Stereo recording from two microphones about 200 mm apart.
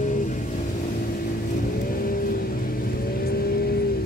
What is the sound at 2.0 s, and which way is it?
Vehicle, 45° left (ahead or behind).